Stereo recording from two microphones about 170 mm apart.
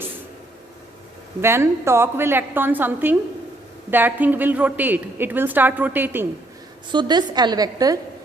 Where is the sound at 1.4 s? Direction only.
15° right (ahead or behind).